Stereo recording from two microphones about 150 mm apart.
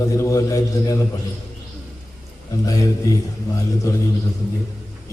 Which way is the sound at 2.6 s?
25° left (ahead or behind).